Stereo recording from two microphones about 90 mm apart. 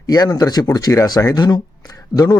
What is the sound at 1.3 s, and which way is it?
Speech, 50° left (ahead or behind).